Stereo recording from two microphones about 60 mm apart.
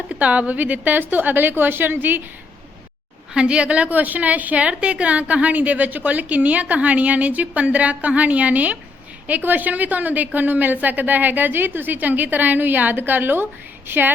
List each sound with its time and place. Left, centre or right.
0.1 s a woman's voice: right
3.3 s a woman's voice: centre; by 14.1 s right